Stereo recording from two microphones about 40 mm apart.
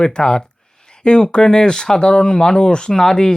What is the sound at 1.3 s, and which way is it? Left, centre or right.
Speech, centre.